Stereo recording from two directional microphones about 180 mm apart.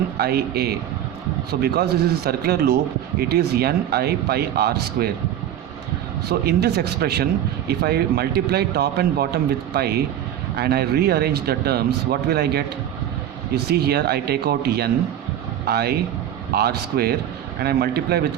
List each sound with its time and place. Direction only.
0.2 s a man's voice: 60° right (ahead or behind)
6.2 s a man's voice: 65° right (ahead or behind)